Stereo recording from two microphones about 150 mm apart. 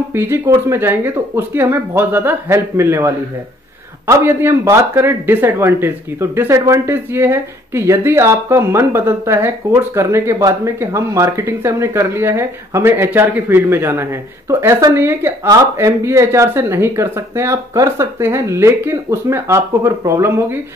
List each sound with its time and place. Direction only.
0.1 s speech: 15° right (ahead or behind)